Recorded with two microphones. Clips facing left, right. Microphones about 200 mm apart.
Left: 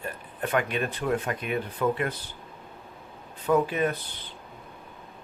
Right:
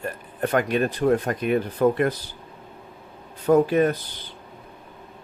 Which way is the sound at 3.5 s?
40° right (ahead or behind).